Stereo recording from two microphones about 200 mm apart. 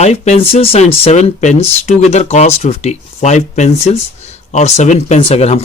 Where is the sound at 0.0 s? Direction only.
35° left (ahead or behind).